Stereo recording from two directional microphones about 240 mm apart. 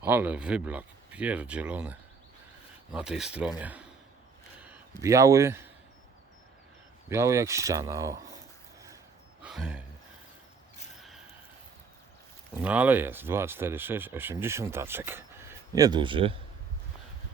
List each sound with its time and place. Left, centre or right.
0.0 s a man's voice: centre
7.1 s speech: centre
9.4 s a sound: centre
12.6 s speech: centre